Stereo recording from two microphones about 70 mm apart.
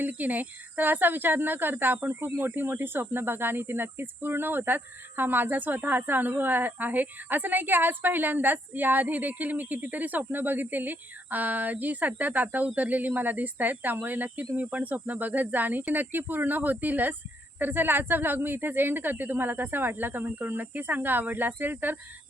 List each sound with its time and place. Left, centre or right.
0.0 s speech: right